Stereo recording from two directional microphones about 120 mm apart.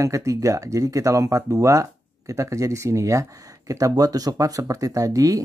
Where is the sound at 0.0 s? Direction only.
25° right (ahead or behind).